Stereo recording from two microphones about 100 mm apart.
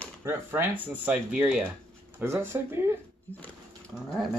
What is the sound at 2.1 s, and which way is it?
Speech, 25° right (ahead or behind).